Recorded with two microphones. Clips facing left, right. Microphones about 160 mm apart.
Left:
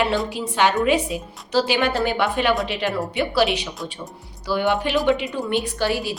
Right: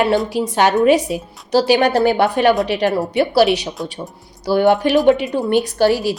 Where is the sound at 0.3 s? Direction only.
40° right (ahead or behind).